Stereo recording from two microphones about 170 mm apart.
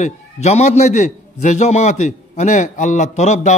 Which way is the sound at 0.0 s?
40° left (ahead or behind).